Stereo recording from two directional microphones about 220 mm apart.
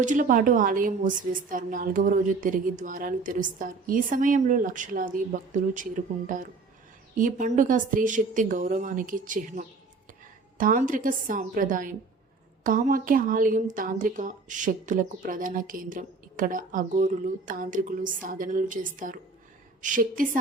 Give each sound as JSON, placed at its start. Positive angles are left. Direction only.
{"t": 0.0, "sound": "a woman's voice", "side_deg": -35}